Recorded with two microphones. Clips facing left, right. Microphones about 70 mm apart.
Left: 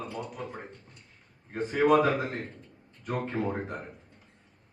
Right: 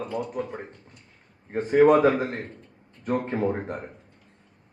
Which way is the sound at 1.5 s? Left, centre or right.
Right.